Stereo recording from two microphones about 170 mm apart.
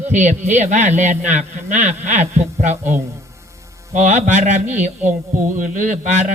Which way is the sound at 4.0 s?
45° right (ahead or behind).